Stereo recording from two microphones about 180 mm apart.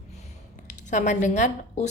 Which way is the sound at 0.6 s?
45° left (ahead or behind).